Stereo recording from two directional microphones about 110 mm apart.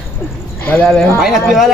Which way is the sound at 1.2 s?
5° right (ahead or behind).